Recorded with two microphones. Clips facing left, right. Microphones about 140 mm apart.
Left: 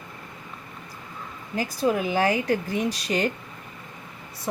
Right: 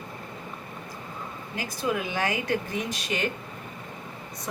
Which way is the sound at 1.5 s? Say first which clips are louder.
Left 5 dB; 35° left (ahead or behind).